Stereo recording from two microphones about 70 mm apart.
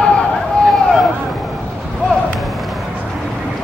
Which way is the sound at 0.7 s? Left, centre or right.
Centre.